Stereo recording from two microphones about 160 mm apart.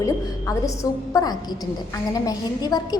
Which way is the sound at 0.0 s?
20° left (ahead or behind).